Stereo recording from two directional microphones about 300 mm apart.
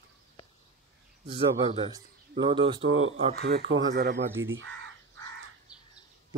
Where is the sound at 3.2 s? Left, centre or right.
Right.